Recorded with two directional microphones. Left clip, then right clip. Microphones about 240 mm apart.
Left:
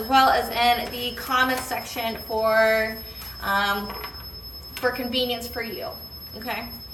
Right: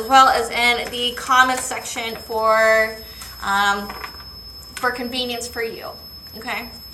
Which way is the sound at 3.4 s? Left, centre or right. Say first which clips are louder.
Right 5 dB; centre.